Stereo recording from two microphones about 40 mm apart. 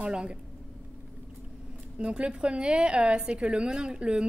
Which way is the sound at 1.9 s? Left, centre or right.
Right.